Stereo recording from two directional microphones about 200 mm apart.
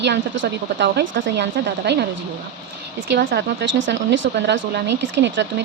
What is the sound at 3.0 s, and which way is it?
Speech, 60° right (ahead or behind).